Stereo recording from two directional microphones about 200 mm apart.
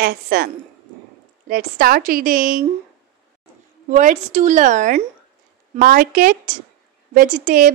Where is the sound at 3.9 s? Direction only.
40° right (ahead or behind).